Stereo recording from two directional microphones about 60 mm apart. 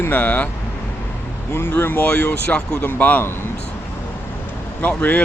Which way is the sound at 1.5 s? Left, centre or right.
Left.